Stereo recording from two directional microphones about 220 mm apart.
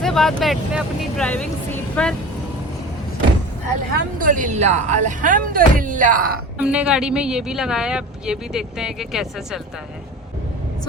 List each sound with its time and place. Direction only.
0.0 s speech: centre (ahead or behind)
3.9 s speech: 35° right (ahead or behind)
6.6 s speech: 5° right (ahead or behind)